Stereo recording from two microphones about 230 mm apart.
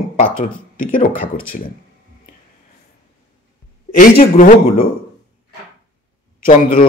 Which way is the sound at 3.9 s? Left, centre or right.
Left.